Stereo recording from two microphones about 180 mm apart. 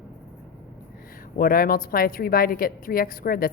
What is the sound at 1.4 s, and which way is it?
A woman's voice, 55° left (ahead or behind).